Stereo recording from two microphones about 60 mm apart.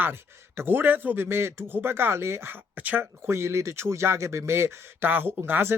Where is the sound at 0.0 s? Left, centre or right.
Right.